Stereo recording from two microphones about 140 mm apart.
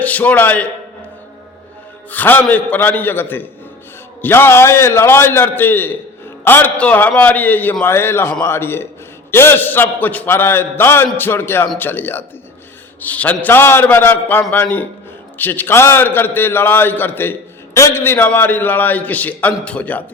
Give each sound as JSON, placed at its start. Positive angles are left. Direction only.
{"t": 0.0, "sound": "a man's voice", "side_deg": 10}
{"t": 2.0, "sound": "a man's voice", "side_deg": 15}